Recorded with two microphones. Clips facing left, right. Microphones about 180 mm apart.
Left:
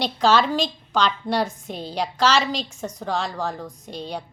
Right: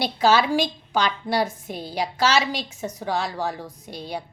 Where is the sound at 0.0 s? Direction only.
5° right (ahead or behind).